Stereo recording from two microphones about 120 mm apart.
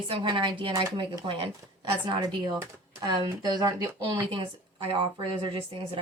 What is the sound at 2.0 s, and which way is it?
Speech, 40° right (ahead or behind).